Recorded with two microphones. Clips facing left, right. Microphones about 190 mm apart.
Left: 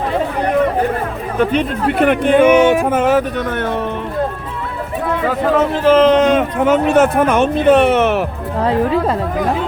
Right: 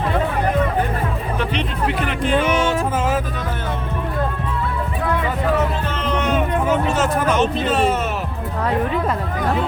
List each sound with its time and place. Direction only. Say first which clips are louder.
1.4 s speech: left 9 dB; 50° left (ahead or behind)
2.6 s music: left 8 dB; 15° left (ahead or behind)
2.8 s speech: left 7 dB; 65° left (ahead or behind)
5.5 s speech: left 11 dB; 90° left; by 8.2 s 75° left (ahead or behind)
8.6 s speech: left 5 dB; 30° left (ahead or behind)